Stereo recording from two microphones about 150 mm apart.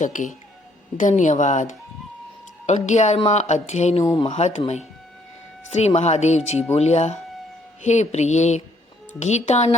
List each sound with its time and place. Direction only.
0.0 s speech: 55° left (ahead or behind)
5.7 s speech: 45° left (ahead or behind)